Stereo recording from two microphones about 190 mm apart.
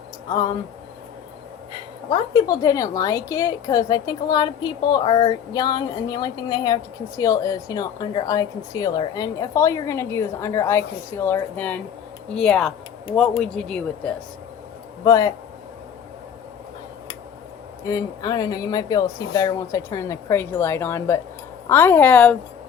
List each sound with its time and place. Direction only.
2.0 s a woman's voice: 20° left (ahead or behind); by 14.2 s 5° left (ahead or behind)
15.0 s a woman's voice: 15° left (ahead or behind)
17.8 s a woman's voice: 20° left (ahead or behind)